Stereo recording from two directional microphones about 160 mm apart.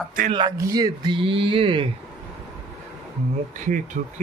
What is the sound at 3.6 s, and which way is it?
Speech, 50° right (ahead or behind).